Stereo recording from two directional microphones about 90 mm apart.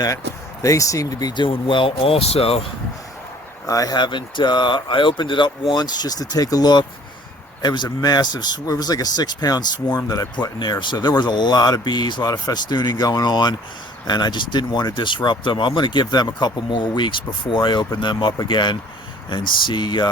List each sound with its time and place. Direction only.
0.6 s speech: 35° left (ahead or behind)
1.5 s speech: 80° left
3.7 s speech: 45° left (ahead or behind)